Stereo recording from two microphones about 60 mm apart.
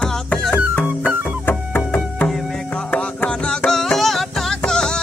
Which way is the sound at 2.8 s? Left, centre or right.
Centre.